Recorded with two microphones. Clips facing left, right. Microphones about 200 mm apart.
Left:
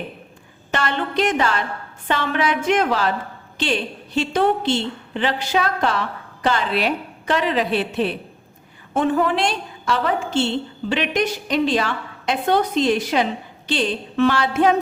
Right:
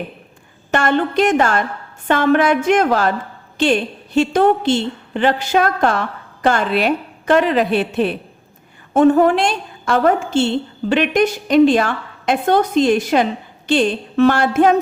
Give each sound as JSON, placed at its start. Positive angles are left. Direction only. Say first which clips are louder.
{"t": 0.7, "sound": "a woman's voice", "louder": "right 7 dB", "side_deg": -50}